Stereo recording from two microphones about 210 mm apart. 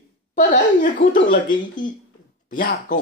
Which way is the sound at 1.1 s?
40° left (ahead or behind).